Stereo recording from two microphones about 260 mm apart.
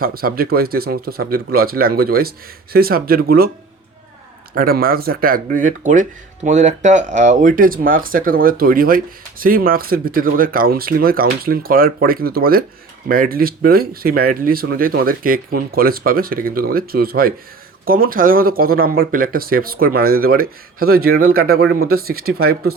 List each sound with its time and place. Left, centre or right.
0.0 s speech: right
4.5 s speech: right